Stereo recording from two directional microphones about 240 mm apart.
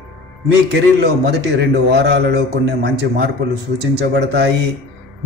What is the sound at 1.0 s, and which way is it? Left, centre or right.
A man's voice, right.